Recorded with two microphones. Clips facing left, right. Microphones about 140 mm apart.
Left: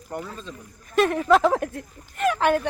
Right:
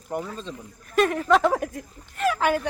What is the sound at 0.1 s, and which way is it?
Speech, 20° right (ahead or behind).